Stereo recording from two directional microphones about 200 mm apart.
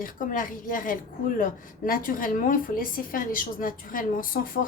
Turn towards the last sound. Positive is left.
turn(degrees=45)  # may be behind; listen again after turning